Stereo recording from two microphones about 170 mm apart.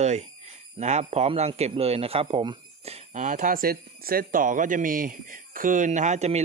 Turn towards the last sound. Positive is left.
turn(degrees=-40)  # may be behind; listen again after turning